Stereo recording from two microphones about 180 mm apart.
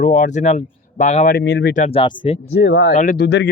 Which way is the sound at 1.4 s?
65° left (ahead or behind).